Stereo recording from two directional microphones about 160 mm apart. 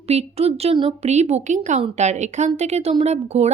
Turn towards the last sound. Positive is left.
turn(degrees=-45)  # may be behind; listen again after turning